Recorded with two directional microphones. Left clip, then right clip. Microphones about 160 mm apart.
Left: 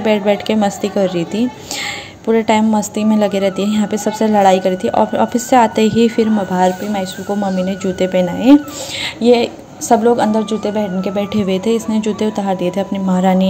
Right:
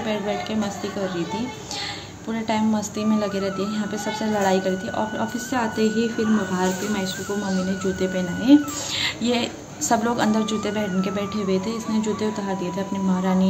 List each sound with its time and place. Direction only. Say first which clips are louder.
0.0 s a woman's voice: left 11 dB; 50° left (ahead or behind)
9.0 s a woman's voice: left 13 dB; 30° left (ahead or behind)
11.3 s a woman's voice: left 9 dB; 45° left (ahead or behind)